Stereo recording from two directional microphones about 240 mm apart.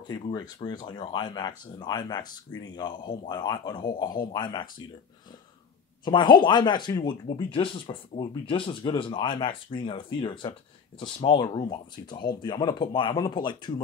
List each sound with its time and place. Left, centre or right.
0.1 s speech: centre
6.0 s speech: centre